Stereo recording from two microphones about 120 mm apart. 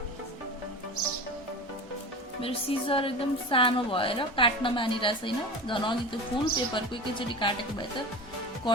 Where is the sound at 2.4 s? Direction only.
50° left (ahead or behind).